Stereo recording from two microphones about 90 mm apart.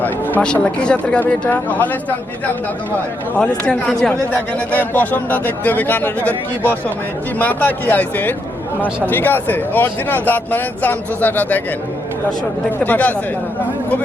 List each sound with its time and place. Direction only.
0.0 s speech: 15° left (ahead or behind)
3.3 s speech: 10° left (ahead or behind)
4.1 s speech: 20° left (ahead or behind)
7.3 s speech: 20° left (ahead or behind)
12.8 s speech: 15° left (ahead or behind)